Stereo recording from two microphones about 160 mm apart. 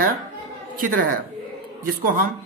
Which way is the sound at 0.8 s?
65° right (ahead or behind).